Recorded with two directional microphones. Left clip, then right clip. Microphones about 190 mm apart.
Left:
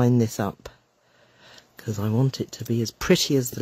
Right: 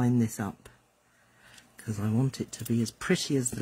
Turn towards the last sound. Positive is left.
turn(degrees=55)  # may be behind; listen again after turning